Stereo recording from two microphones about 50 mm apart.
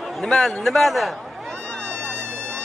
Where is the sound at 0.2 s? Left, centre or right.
Centre.